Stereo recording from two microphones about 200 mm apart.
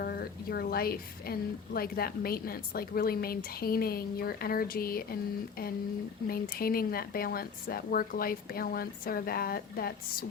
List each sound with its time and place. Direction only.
0.0 s a woman's voice: 50° left (ahead or behind)
6.2 s a woman's voice: 50° left (ahead or behind)